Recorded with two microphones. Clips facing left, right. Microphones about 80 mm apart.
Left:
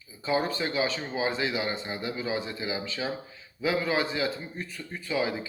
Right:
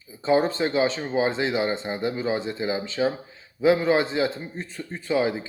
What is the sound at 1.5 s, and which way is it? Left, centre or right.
Speech, right.